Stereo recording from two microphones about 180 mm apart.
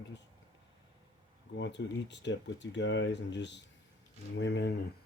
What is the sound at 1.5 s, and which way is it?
Speech, 75° left (ahead or behind).